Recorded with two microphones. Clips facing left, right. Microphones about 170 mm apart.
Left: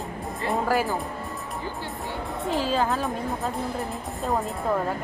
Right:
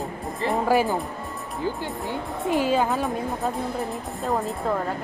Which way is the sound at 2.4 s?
15° right (ahead or behind).